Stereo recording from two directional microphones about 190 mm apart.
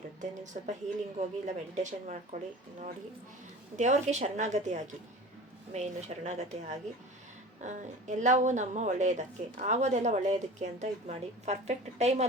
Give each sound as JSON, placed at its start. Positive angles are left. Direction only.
{"t": 0.2, "sound": "a woman's voice", "side_deg": -40}
{"t": 3.8, "sound": "a woman's voice", "side_deg": -40}